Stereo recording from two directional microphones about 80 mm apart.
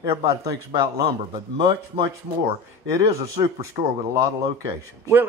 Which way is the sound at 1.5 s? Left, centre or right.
Right.